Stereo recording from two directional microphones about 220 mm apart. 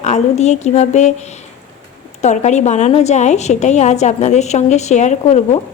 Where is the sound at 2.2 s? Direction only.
30° left (ahead or behind).